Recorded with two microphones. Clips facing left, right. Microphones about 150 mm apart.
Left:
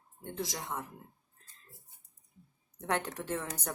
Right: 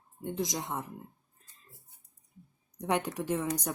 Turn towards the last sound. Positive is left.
turn(degrees=-10)  # may be behind; listen again after turning